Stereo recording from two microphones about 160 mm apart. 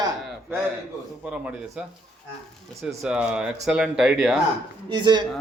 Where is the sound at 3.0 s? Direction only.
5° right (ahead or behind).